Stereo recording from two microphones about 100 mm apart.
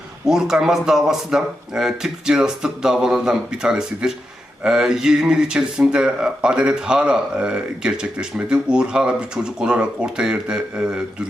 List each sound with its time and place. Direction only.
0.3 s speech: 5° right (ahead or behind)